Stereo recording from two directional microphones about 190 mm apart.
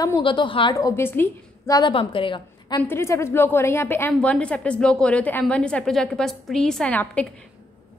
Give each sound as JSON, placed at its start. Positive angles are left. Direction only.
{"t": 0.0, "sound": "a woman's voice", "side_deg": 25}
{"t": 2.8, "sound": "a woman's voice", "side_deg": 15}